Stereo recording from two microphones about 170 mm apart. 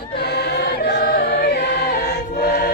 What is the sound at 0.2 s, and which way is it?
Choir, 75° left (ahead or behind).